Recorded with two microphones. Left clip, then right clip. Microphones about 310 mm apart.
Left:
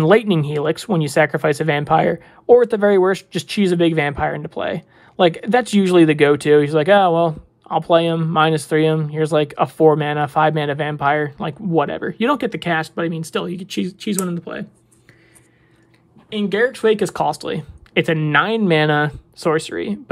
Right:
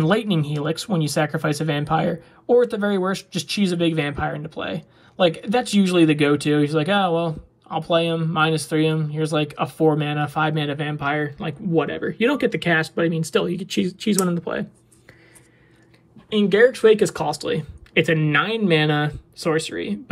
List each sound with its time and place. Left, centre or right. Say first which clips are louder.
0.3 s speech: left 6 dB; left; by 14.7 s centre
16.3 s speech: right 3 dB; centre